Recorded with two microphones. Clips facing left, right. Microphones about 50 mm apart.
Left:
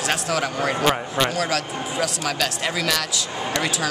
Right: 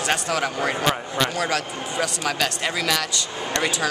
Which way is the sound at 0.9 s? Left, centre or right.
Centre.